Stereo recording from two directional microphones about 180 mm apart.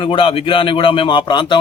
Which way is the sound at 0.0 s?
30° left (ahead or behind).